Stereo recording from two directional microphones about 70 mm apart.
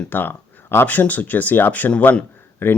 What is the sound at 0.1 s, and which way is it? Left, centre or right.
Speech, left.